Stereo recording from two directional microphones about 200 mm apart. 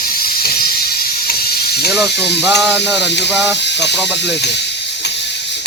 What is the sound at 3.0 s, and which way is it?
Speech, 60° left (ahead or behind).